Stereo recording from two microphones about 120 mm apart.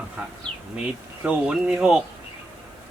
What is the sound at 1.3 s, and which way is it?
Speech, 5° right (ahead or behind).